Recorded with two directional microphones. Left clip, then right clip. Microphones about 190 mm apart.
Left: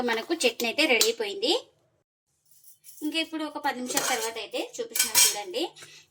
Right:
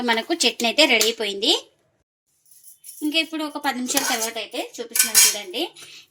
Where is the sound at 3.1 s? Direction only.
50° right (ahead or behind).